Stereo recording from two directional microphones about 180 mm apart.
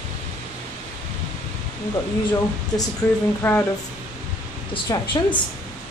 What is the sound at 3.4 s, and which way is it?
Speech, 15° left (ahead or behind).